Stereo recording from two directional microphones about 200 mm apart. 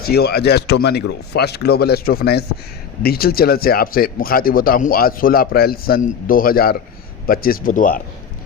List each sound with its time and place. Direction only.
0.0 s speech: 50° left (ahead or behind)